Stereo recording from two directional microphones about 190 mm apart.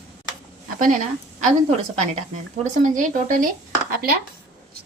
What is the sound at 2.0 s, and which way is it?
Speech, 40° right (ahead or behind).